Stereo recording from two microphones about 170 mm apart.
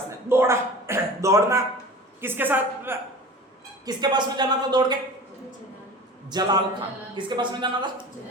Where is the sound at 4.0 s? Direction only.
25° right (ahead or behind).